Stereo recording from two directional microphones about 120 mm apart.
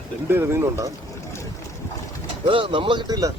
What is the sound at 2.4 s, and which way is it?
Speech, 45° right (ahead or behind).